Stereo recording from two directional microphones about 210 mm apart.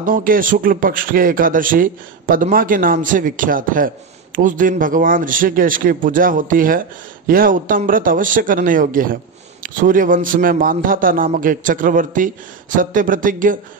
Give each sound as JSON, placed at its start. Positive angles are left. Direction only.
{"t": 0.0, "sound": "speech", "side_deg": -40}